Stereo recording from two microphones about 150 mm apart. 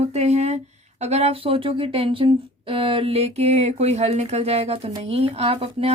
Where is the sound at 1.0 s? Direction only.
45° right (ahead or behind).